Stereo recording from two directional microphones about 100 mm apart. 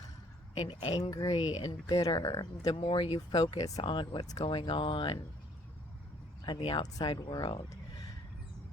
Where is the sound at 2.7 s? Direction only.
70° left (ahead or behind).